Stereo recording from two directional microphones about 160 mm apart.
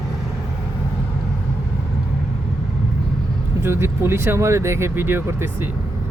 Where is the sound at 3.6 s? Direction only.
15° right (ahead or behind).